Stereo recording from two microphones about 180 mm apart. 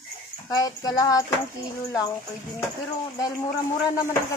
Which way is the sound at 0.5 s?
20° left (ahead or behind).